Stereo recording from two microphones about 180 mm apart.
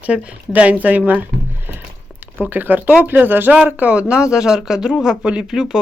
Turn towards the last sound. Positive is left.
turn(degrees=0)  # may be behind; listen again after turning